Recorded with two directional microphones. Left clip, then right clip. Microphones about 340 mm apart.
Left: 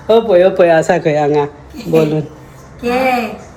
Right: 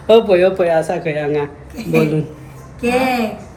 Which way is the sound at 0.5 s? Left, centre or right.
Left.